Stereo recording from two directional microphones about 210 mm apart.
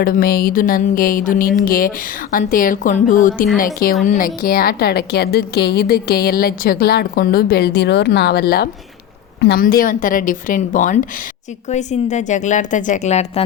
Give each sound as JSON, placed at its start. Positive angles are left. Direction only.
{"t": 0.0, "sound": "a woman's voice", "side_deg": 45}